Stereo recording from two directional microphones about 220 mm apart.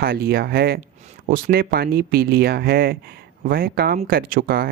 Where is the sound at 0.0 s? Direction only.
45° right (ahead or behind).